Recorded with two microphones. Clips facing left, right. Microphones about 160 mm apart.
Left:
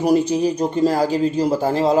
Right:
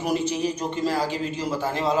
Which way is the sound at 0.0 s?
40° left (ahead or behind).